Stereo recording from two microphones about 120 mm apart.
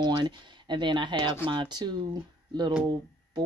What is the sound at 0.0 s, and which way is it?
Speech, 40° right (ahead or behind).